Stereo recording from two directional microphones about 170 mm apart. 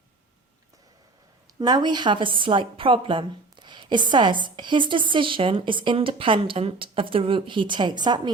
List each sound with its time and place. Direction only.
1.5 s a woman's voice: 25° right (ahead or behind)